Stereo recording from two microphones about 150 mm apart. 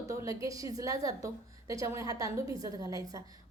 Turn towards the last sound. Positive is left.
turn(degrees=-25)  # may be behind; listen again after turning